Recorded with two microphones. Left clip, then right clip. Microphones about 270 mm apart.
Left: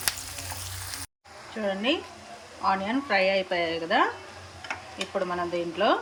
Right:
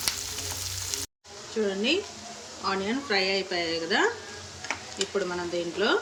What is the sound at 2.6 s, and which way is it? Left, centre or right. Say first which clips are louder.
Speech: left 3 dB; centre.